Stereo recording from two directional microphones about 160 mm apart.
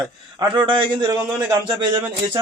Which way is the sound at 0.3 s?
30° right (ahead or behind).